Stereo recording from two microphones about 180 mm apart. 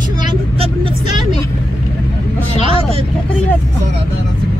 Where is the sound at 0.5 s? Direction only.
30° right (ahead or behind).